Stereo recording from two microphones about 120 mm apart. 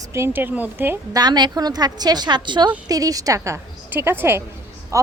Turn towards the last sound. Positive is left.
turn(degrees=-25)  # may be behind; listen again after turning